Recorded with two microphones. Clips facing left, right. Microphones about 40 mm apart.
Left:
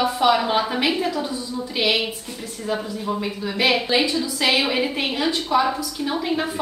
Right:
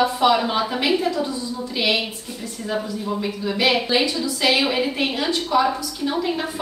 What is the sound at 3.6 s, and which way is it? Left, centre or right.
A woman's voice, centre.